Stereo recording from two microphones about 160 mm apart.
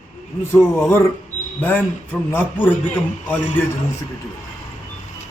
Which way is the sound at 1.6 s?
10° left (ahead or behind).